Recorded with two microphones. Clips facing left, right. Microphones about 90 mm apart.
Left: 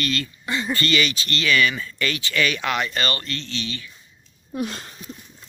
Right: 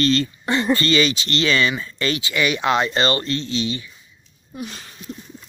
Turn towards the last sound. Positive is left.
turn(degrees=45)  # may be behind; listen again after turning